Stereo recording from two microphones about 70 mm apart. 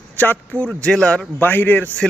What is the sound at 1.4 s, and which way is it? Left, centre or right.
Speech, left.